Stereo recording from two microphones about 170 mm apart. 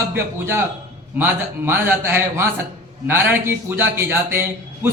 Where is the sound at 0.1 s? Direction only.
15° right (ahead or behind).